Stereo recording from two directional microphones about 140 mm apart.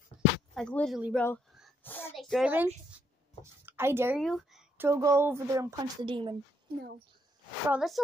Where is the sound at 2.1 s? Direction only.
Centre (ahead or behind).